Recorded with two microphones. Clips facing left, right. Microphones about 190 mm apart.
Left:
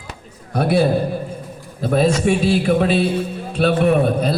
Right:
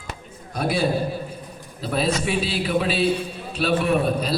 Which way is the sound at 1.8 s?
50° left (ahead or behind).